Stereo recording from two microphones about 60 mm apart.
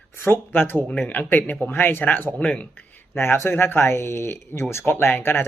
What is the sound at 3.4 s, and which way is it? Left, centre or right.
Speech, left.